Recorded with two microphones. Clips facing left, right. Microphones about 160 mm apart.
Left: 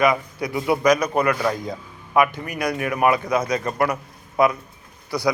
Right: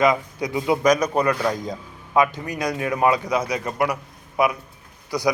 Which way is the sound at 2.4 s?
20° right (ahead or behind).